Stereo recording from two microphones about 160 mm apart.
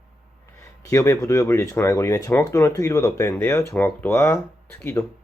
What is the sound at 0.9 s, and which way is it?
Speech, 20° left (ahead or behind).